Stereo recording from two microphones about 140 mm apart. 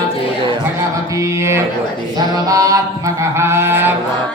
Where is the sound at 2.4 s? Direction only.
25° right (ahead or behind).